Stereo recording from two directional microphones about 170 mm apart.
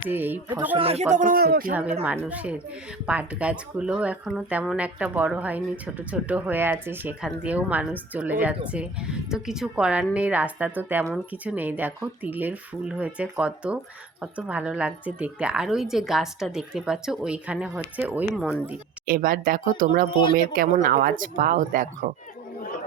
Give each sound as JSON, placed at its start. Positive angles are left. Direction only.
{"t": 0.1, "sound": "speech", "side_deg": -10}
{"t": 0.8, "sound": "speech", "side_deg": -35}
{"t": 1.7, "sound": "a woman's voice", "side_deg": -10}
{"t": 18.4, "sound": "speech", "side_deg": 10}
{"t": 19.0, "sound": "speech", "side_deg": -55}